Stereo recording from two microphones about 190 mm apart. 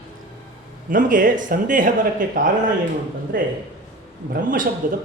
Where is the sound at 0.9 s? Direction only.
45° right (ahead or behind).